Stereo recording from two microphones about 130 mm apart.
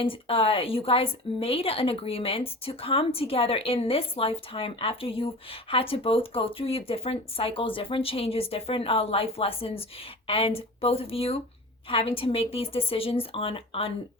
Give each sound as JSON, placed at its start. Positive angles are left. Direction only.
{"t": 0.0, "sound": "a woman's voice", "side_deg": 45}